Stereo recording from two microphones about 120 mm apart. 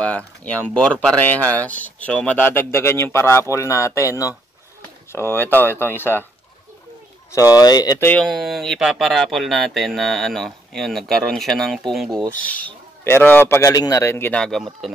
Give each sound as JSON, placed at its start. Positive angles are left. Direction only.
{"t": 0.0, "sound": "speech", "side_deg": 10}
{"t": 7.3, "sound": "speech", "side_deg": 30}
{"t": 8.0, "sound": "speech", "side_deg": 10}
{"t": 12.3, "sound": "speech", "side_deg": 10}
{"t": 14.4, "sound": "speech", "side_deg": 0}